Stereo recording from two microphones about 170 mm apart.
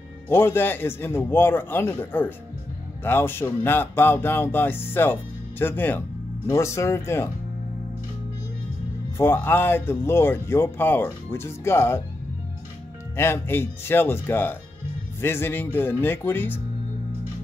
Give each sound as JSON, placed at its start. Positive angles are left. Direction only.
{"t": 0.3, "sound": "speech", "side_deg": 15}
{"t": 9.2, "sound": "speech", "side_deg": 15}
{"t": 13.1, "sound": "speech", "side_deg": 15}